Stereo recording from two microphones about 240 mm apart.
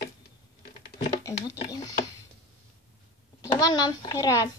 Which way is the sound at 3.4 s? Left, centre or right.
Centre.